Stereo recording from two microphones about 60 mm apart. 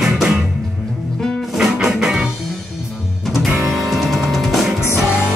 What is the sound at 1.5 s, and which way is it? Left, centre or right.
Music, centre.